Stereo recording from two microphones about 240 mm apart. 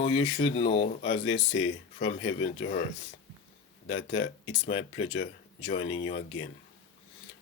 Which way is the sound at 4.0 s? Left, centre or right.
Left.